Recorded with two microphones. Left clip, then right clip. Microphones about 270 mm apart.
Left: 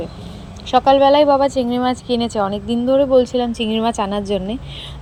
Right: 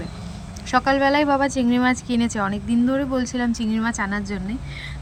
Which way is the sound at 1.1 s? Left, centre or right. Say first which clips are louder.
Left 7 dB; right.